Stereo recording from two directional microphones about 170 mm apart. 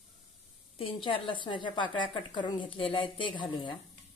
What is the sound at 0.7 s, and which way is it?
A woman's voice, 30° left (ahead or behind).